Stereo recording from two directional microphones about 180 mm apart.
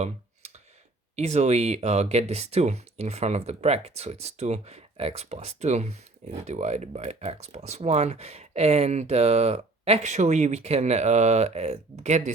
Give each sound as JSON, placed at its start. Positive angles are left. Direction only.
{"t": 0.0, "sound": "clicking", "side_deg": -40}
{"t": 1.1, "sound": "speech", "side_deg": -40}